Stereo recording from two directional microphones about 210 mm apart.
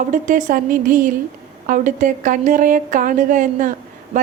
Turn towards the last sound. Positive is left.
turn(degrees=-40)  # may be behind; listen again after turning